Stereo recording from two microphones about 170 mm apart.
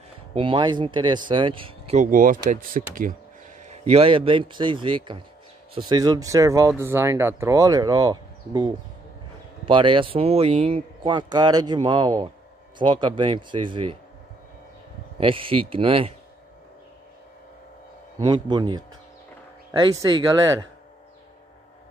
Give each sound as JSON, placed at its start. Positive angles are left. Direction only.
{"t": 0.3, "sound": "a man's voice", "side_deg": -30}
{"t": 2.0, "sound": "speech", "side_deg": -50}
{"t": 3.6, "sound": "a man's voice", "side_deg": -35}
{"t": 15.1, "sound": "speech", "side_deg": -30}
{"t": 18.2, "sound": "a man's voice", "side_deg": -25}